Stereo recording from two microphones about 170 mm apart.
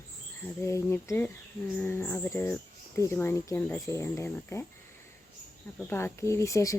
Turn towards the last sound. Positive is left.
turn(degrees=20)  # may be behind; listen again after turning